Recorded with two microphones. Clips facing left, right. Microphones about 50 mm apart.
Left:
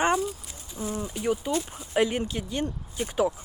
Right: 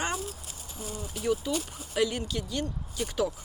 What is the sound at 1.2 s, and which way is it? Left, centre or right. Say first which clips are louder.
Speech: left 1 dB; left.